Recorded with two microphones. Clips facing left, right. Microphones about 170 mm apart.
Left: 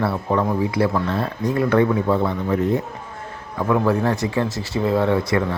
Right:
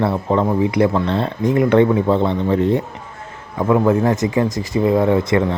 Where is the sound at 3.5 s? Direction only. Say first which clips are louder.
Right 4 dB; 15° right (ahead or behind).